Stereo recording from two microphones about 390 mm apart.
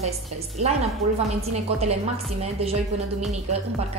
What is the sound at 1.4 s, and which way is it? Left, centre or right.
A woman's voice, centre.